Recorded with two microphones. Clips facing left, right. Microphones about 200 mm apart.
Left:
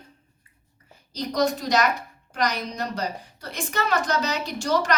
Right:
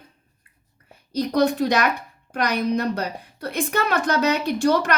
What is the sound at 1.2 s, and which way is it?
A woman's voice, 60° right (ahead or behind).